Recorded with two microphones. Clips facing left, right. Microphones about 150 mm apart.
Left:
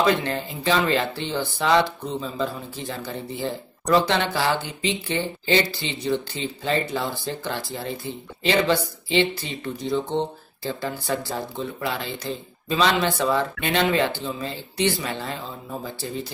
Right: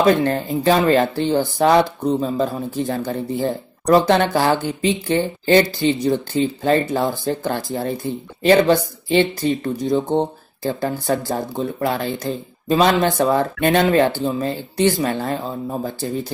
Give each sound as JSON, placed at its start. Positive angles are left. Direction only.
{"t": 0.0, "sound": "speech", "side_deg": -45}